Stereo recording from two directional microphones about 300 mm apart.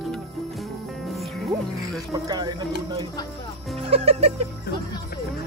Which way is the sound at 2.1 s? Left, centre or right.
Centre.